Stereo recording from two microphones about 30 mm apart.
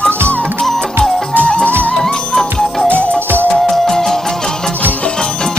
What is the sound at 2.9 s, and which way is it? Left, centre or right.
Music, left.